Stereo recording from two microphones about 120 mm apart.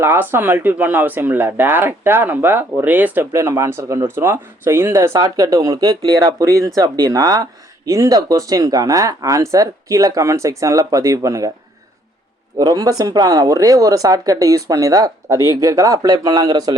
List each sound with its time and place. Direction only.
0.0 s speech: 20° right (ahead or behind)
12.5 s speech: 35° right (ahead or behind)